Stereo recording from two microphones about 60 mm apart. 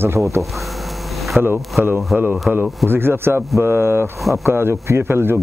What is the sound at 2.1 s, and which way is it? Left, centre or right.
Speech, right.